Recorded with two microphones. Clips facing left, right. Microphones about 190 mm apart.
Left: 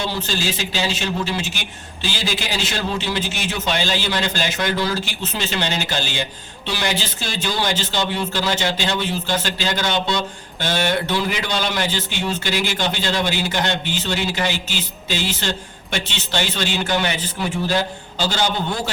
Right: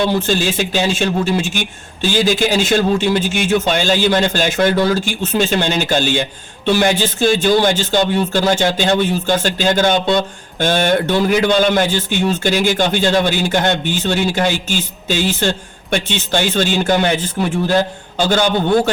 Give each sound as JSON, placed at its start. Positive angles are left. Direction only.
{"t": 0.0, "sound": "a man's voice", "side_deg": -50}